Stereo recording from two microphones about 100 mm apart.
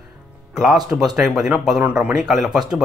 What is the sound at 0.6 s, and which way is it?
Speech, 5° right (ahead or behind).